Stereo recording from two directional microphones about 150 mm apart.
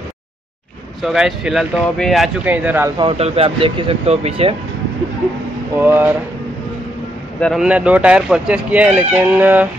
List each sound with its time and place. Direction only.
1.0 s speech: 5° right (ahead or behind)
2.4 s speech: 10° right (ahead or behind)
3.0 s speech: 40° right (ahead or behind)
5.8 s speech: 15° right (ahead or behind)
7.3 s speech: 5° left (ahead or behind)
7.6 s speech: 10° right (ahead or behind)